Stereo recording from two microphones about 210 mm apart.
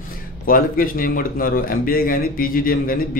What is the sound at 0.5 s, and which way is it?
Speech, 40° left (ahead or behind).